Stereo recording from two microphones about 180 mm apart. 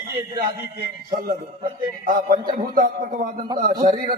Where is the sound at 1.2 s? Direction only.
50° right (ahead or behind).